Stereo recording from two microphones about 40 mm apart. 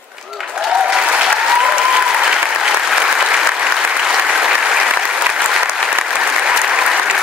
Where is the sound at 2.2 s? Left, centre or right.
Centre.